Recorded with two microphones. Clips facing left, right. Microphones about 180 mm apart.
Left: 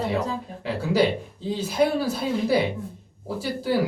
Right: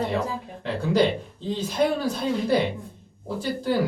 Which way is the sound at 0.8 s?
5° left (ahead or behind).